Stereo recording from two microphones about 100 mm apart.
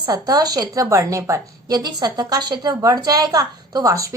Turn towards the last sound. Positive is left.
turn(degrees=-35)  # may be behind; listen again after turning